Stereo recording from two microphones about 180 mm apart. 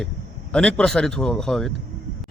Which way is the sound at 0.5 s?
5° left (ahead or behind).